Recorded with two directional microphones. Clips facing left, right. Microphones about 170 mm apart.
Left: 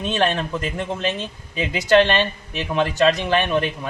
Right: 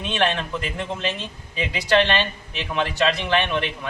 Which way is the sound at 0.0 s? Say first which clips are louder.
Left 2 dB; 40° left (ahead or behind).